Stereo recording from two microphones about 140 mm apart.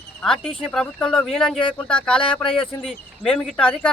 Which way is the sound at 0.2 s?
5° left (ahead or behind).